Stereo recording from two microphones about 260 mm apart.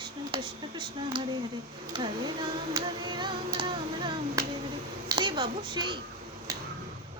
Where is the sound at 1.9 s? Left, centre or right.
Centre.